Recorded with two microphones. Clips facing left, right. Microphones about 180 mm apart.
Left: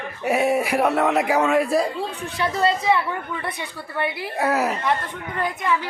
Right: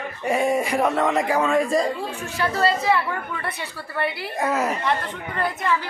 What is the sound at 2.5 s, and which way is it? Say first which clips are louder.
A woman's voice: left 1 dB; 20° left (ahead or behind).